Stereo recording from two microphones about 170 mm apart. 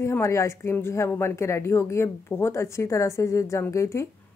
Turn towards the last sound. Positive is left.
turn(degrees=15)  # may be behind; listen again after turning